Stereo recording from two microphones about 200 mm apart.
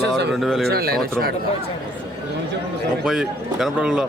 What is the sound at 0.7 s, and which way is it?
Speech, 50° right (ahead or behind).